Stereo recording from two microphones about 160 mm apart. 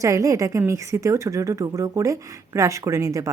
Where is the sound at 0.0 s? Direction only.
20° right (ahead or behind).